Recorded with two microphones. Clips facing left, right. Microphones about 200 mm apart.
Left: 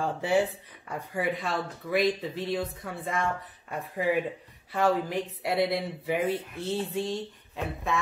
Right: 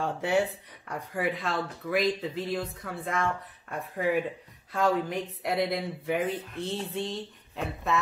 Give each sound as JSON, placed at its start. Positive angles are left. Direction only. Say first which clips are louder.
{"t": 0.0, "sound": "speech", "louder": "left 1 dB", "side_deg": 0}